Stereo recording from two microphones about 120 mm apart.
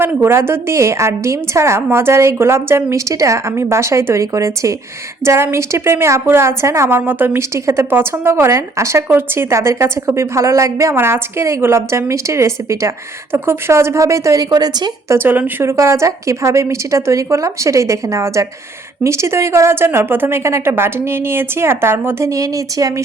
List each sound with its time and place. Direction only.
0.0 s a woman's voice: 20° right (ahead or behind); by 14.8 s 35° right (ahead or behind)
15.1 s a woman's voice: 15° right (ahead or behind)